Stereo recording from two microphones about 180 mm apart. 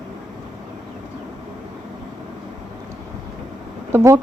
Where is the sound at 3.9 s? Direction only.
15° right (ahead or behind).